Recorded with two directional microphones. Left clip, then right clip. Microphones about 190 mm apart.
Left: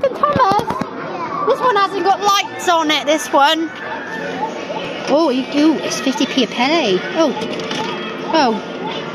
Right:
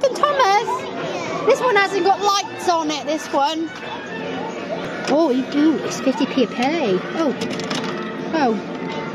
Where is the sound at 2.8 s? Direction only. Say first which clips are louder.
Left 7 dB; 10° left (ahead or behind).